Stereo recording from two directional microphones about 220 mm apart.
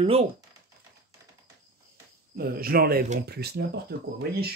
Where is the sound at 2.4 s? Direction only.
45° right (ahead or behind).